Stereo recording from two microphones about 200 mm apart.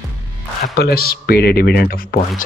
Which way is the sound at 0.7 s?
50° left (ahead or behind).